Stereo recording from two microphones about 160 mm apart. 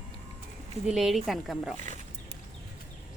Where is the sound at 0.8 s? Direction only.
Centre (ahead or behind).